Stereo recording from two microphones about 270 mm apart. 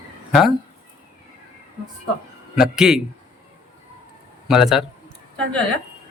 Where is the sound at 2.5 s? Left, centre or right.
Centre.